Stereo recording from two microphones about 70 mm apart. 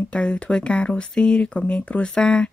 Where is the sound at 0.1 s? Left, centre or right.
Centre.